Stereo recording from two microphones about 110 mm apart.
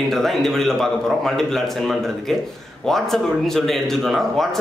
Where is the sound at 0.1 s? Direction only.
Centre (ahead or behind).